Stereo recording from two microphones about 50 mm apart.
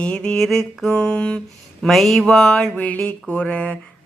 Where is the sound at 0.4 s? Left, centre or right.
Centre.